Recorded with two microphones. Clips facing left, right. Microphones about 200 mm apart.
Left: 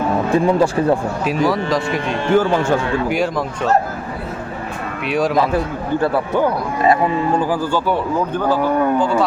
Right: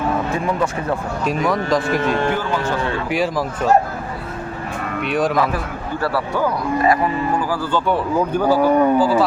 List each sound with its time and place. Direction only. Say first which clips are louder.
0.3 s speech: left 6 dB; 30° left (ahead or behind)
1.2 s speech: left 2 dB; centre (ahead or behind)
2.3 s speech: left 7 dB; 45° left (ahead or behind)
3.1 s speech: left 1 dB; centre (ahead or behind)
5.0 s speech: left 2 dB; centre (ahead or behind)
5.4 s a man's voice: left 3 dB; 25° left (ahead or behind)
8.3 s speech: right 4 dB; 10° right (ahead or behind)